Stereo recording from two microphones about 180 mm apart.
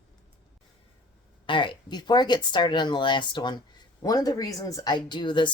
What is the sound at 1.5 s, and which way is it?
Speech, 25° left (ahead or behind).